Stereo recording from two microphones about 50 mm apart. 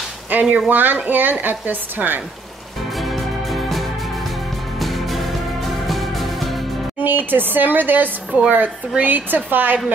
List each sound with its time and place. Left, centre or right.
0.3 s speech: right
3.0 s music: centre
7.0 s speech: right
8.4 s speech: right